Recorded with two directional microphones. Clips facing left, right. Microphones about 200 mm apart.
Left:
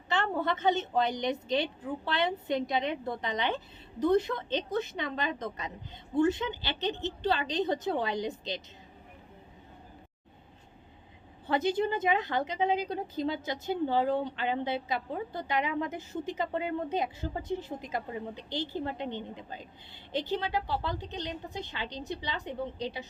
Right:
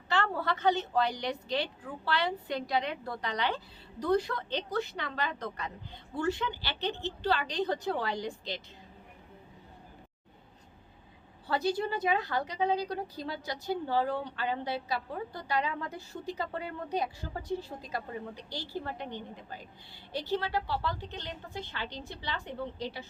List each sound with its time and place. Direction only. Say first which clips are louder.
0.1 s a woman's voice: left 1 dB; 20° left (ahead or behind)
11.4 s a woman's voice: left 2 dB; 20° left (ahead or behind)